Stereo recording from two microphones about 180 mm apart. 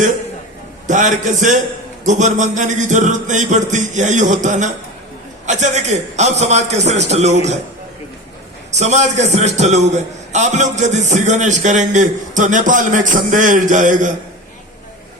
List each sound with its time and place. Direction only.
0.9 s a man's voice: 45° right (ahead or behind)
8.7 s a man's voice: 40° right (ahead or behind)